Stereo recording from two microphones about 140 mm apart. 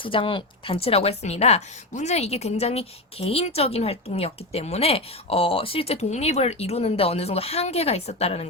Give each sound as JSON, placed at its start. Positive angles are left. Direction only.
{"t": 0.0, "sound": "a woman's voice", "side_deg": 40}